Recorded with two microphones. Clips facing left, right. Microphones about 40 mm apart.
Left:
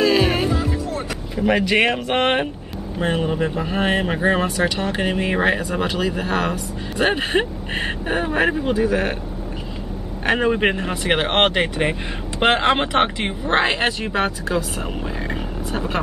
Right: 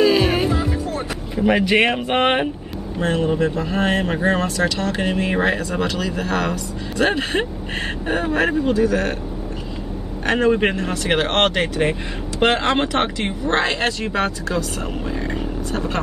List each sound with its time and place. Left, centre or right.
0.0 s music: centre
1.3 s speech: centre
3.0 s speech: centre
10.2 s speech: centre